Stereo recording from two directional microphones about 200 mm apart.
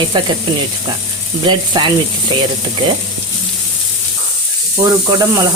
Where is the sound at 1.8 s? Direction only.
20° right (ahead or behind).